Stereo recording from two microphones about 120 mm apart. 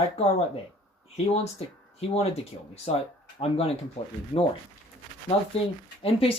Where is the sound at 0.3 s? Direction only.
60° left (ahead or behind).